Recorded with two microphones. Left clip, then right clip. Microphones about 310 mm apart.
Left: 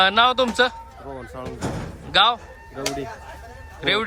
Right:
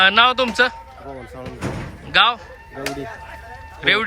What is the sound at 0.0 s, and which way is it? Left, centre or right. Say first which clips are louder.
Speech: right 3 dB; centre.